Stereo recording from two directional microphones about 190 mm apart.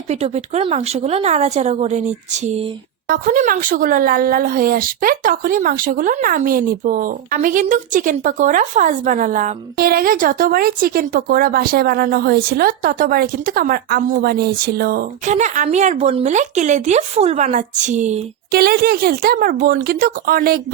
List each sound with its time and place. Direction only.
0.1 s speech: 35° right (ahead or behind); by 15.4 s 55° right (ahead or behind)
15.4 s speech: 40° right (ahead or behind)
18.5 s speech: 55° right (ahead or behind)